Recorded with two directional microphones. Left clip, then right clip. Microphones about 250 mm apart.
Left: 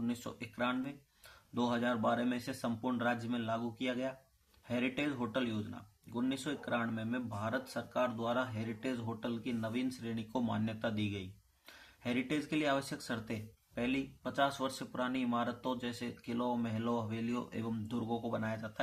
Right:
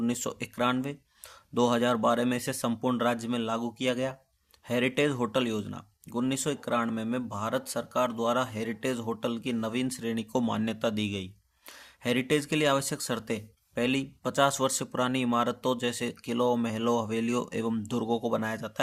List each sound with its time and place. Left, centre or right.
0.0 s speech: right